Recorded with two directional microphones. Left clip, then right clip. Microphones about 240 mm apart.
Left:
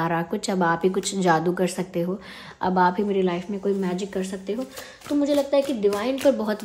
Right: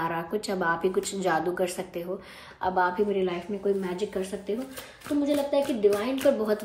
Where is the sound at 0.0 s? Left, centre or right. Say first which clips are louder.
Left 4 dB; left.